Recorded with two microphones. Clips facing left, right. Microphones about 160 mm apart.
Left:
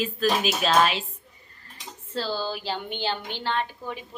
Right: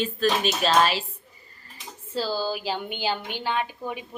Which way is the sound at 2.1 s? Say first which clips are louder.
Right 2 dB; 10° right (ahead or behind).